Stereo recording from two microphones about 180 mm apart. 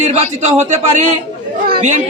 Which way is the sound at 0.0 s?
40° right (ahead or behind).